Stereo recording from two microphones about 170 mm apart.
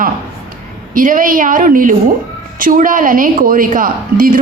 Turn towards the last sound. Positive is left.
turn(degrees=-55)  # may be behind; listen again after turning